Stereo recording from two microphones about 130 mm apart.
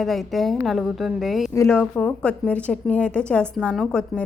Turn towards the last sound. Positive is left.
turn(degrees=5)  # may be behind; listen again after turning